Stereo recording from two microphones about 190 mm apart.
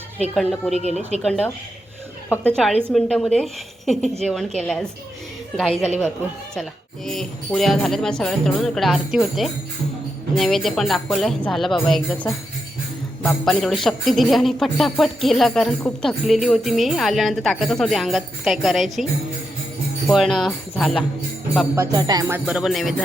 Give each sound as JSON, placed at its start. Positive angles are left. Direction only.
{"t": 0.3, "sound": "speech", "side_deg": 0}
{"t": 2.6, "sound": "speech", "side_deg": 5}
{"t": 20.1, "sound": "speech", "side_deg": 0}
{"t": 21.8, "sound": "music", "side_deg": -20}
{"t": 22.4, "sound": "speech", "side_deg": -5}